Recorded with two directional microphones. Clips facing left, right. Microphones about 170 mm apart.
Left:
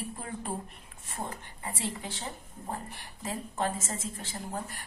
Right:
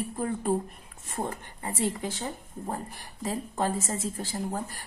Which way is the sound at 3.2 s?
35° right (ahead or behind).